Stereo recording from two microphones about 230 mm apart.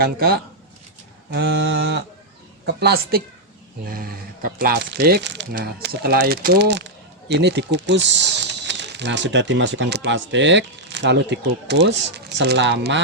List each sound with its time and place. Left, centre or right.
0.0 s speech: right